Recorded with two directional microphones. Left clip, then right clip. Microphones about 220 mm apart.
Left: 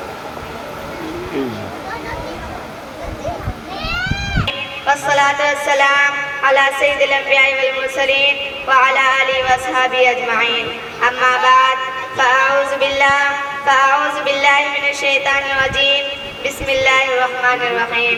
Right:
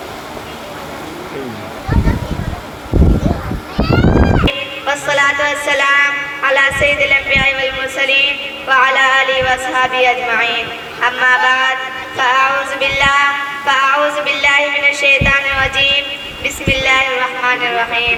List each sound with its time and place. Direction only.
4.4 s speech: 20° right (ahead or behind)
11.0 s music: 20° right (ahead or behind)